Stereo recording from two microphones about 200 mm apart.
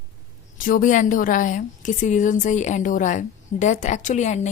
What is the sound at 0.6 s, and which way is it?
A woman's voice, 40° left (ahead or behind).